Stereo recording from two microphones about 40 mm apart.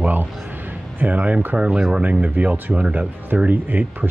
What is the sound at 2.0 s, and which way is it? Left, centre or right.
Speech, right.